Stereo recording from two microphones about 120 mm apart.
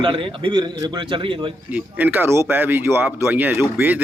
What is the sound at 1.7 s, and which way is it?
Speech, 15° right (ahead or behind).